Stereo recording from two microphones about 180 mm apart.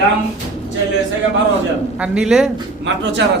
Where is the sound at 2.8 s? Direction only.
85° right.